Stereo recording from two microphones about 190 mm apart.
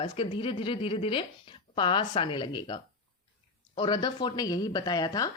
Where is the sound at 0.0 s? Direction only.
25° left (ahead or behind).